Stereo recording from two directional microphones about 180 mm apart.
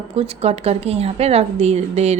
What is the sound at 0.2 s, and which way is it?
A woman's voice, 35° right (ahead or behind).